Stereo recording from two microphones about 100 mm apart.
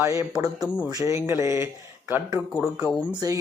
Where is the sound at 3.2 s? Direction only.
35° right (ahead or behind).